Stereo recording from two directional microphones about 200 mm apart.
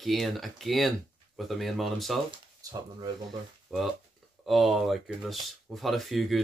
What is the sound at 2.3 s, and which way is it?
Speech, 20° right (ahead or behind).